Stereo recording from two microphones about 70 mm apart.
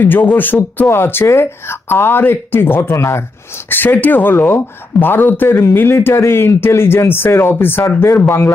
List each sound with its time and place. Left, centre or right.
0.0 s speech: left
2.9 s speech: left
3.7 s speech: left